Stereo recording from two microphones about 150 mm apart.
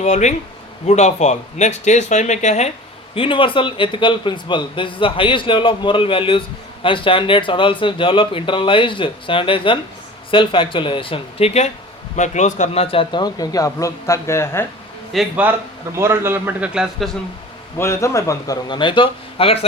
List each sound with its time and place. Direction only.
0.0 s speech: 50° left (ahead or behind)
3.2 s a man's voice: 35° left (ahead or behind); by 14.6 s 15° left (ahead or behind)
15.1 s a man's voice: centre (ahead or behind)
16.0 s a man's voice: 15° right (ahead or behind)
17.7 s speech: 20° left (ahead or behind); by 19.5 s 35° left (ahead or behind)